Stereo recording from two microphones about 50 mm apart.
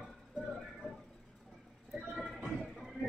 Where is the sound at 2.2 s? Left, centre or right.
Centre.